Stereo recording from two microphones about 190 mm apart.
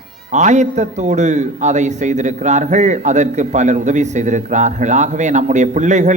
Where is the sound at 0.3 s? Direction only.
40° right (ahead or behind).